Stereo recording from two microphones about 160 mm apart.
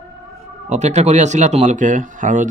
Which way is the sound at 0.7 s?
45° right (ahead or behind).